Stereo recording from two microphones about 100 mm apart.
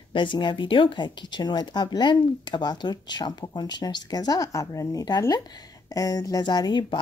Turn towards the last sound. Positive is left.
turn(degrees=45)  # may be behind; listen again after turning